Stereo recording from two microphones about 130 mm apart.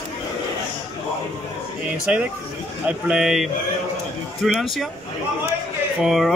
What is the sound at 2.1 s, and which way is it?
Speech, 10° right (ahead or behind).